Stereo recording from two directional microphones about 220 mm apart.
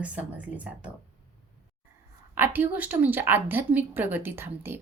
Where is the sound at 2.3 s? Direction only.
10° right (ahead or behind).